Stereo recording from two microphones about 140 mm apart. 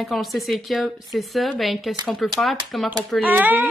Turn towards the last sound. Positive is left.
turn(degrees=-15)  # may be behind; listen again after turning